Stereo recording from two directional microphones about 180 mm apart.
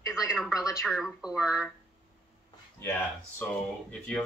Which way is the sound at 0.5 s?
20° left (ahead or behind).